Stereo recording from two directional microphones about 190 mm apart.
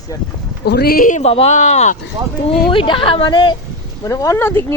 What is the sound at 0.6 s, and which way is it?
Speech, 55° left (ahead or behind).